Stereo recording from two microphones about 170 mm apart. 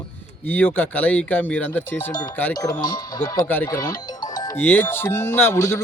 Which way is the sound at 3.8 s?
20° left (ahead or behind).